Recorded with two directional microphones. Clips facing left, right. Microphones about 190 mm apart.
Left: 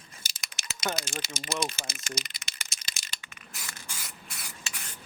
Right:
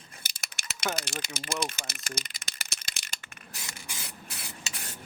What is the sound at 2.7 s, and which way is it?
Rattle, 60° right (ahead or behind).